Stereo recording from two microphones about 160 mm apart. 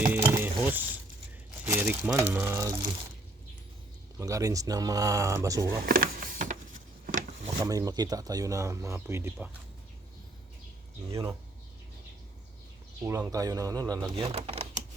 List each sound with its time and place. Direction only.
0.3 s mechanisms: 10° right (ahead or behind)
1.6 s speech: 15° right (ahead or behind)
4.2 s speech: 20° right (ahead or behind)
5.6 s a sound: 80° right; by 7.5 s 50° right (ahead or behind)
7.6 s speech: 20° right (ahead or behind)
11.1 s speech: 20° right (ahead or behind)
13.1 s speech: 20° right (ahead or behind)
14.3 s speech: 40° right (ahead or behind)